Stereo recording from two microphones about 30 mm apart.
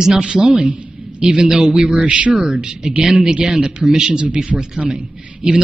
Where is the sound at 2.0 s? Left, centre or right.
Right.